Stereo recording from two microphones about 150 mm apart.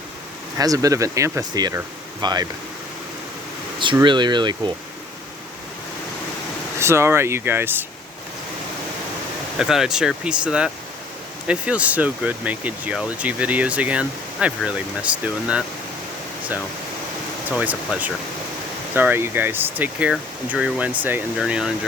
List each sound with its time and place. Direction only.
0.5 s speech: 20° right (ahead or behind)
4.0 s speech: 30° right (ahead or behind)
6.7 s speech: 15° right (ahead or behind)
9.6 s speech: 5° right (ahead or behind)
17.5 s speech: 10° right (ahead or behind)